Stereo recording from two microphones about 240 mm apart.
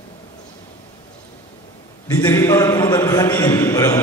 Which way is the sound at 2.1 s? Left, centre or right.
Centre.